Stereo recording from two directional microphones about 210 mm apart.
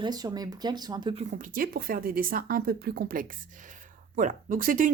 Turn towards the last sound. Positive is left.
turn(degrees=-40)  # may be behind; listen again after turning